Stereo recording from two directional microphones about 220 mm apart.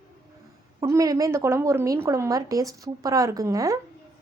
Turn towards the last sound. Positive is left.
turn(degrees=-15)  # may be behind; listen again after turning